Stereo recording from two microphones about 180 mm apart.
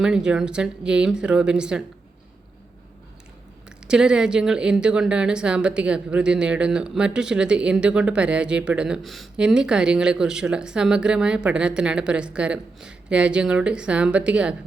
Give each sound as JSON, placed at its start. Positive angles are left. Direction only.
{"t": 0.0, "sound": "a woman's voice", "side_deg": -5}
{"t": 3.8, "sound": "a woman's voice", "side_deg": -5}